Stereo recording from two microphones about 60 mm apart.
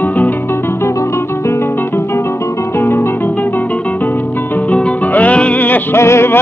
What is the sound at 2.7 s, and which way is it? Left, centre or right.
Guitar, left.